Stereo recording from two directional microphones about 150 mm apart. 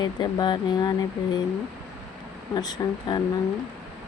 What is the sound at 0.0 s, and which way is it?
Speech, 30° left (ahead or behind).